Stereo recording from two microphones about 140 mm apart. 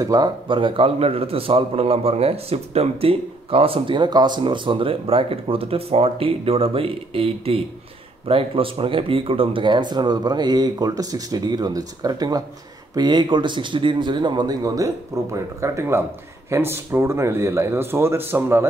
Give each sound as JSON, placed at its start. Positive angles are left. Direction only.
{"t": 0.0, "sound": "a man's voice", "side_deg": -30}